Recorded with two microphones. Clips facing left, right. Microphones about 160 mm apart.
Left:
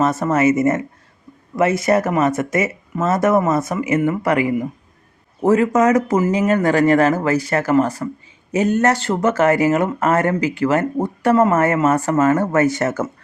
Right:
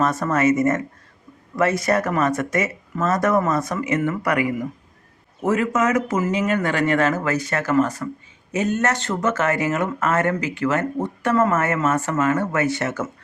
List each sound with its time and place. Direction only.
0.0 s speech: 25° left (ahead or behind)
1.8 s speech: 25° left (ahead or behind); by 13.1 s 45° left (ahead or behind)